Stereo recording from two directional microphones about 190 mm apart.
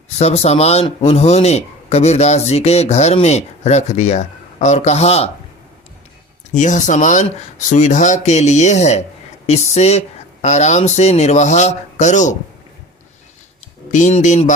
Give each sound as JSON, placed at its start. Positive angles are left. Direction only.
{"t": 0.2, "sound": "speech", "side_deg": 35}
{"t": 6.5, "sound": "speech", "side_deg": 40}
{"t": 13.9, "sound": "speech", "side_deg": 40}